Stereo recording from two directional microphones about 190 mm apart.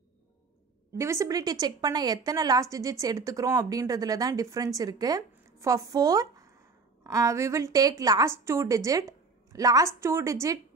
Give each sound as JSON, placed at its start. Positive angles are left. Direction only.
{"t": 0.9, "sound": "a woman's voice", "side_deg": -15}